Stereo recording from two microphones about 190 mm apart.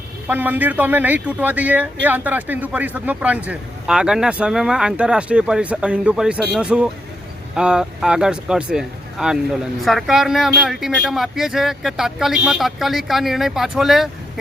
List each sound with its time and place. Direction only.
0.3 s a man's voice: 10° right (ahead or behind)